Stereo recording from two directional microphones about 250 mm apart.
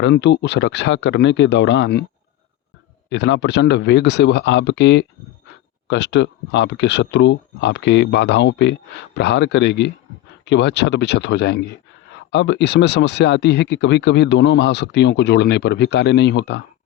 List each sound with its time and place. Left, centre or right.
0.0 s speech: left
3.1 s speech: left